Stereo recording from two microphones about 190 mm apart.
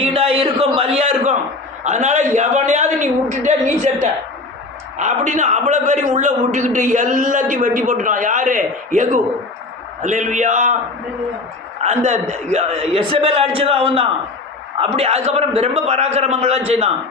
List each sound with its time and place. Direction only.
0.0 s a sound: 30° right (ahead or behind)
1.8 s a man's voice: 40° right (ahead or behind)
11.8 s a man's voice: 40° right (ahead or behind)